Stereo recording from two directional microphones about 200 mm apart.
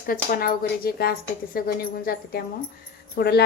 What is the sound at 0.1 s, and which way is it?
Speech, 45° left (ahead or behind).